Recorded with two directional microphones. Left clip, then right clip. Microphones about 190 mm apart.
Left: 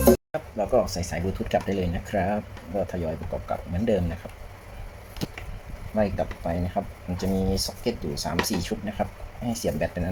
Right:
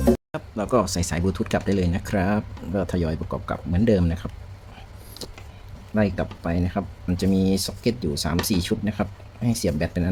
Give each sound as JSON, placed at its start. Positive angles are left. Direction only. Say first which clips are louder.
{"t": 0.3, "sound": "speech", "louder": "even", "side_deg": -40}
{"t": 6.0, "sound": "speech", "louder": "right 1 dB", "side_deg": -40}